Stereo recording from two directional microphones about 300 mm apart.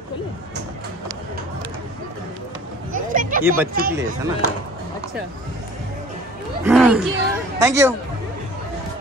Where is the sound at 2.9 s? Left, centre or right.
Right.